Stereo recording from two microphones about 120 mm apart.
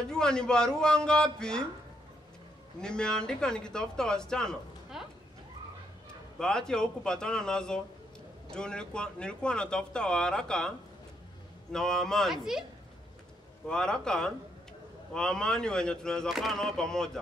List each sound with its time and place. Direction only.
0.1 s speech: 5° left (ahead or behind)
2.8 s speech: 5° left (ahead or behind)
6.3 s speech: 5° left (ahead or behind)
11.7 s speech: 5° left (ahead or behind)
13.7 s speech: 5° left (ahead or behind)